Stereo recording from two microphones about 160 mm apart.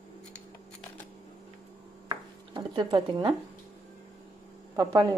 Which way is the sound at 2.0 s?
30° right (ahead or behind).